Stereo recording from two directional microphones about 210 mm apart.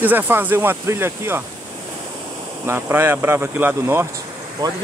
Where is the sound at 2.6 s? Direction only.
10° right (ahead or behind).